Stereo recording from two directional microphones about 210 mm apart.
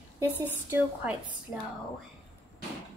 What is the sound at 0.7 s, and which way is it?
Speech, 5° right (ahead or behind).